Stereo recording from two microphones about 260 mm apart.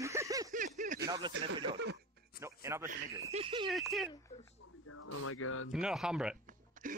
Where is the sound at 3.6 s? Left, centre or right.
Centre.